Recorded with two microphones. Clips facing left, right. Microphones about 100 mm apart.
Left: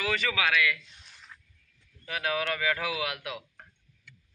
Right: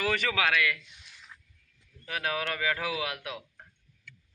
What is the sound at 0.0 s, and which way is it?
Speech, 45° right (ahead or behind).